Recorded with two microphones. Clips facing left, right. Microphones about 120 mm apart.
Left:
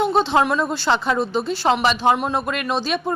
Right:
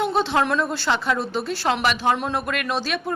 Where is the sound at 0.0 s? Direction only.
20° left (ahead or behind).